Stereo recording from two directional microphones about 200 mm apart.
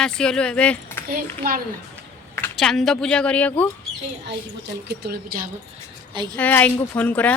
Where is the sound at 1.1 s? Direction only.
45° right (ahead or behind).